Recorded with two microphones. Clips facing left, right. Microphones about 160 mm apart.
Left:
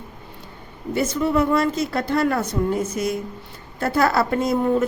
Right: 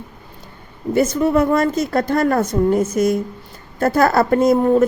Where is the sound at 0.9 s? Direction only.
45° right (ahead or behind).